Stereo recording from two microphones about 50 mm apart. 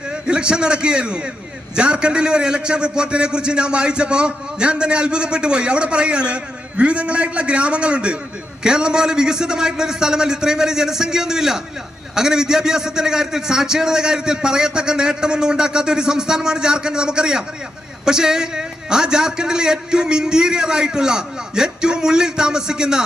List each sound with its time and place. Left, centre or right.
0.1 s a man's voice: centre